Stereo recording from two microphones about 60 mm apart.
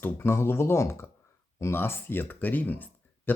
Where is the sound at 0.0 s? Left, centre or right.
Left.